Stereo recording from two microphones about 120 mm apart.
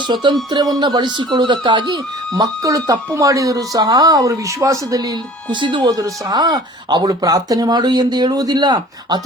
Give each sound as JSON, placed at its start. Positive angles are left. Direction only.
{"t": 0.1, "sound": "speech", "side_deg": -35}